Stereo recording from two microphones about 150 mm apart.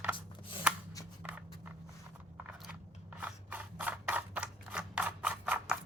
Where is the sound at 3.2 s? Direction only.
10° right (ahead or behind).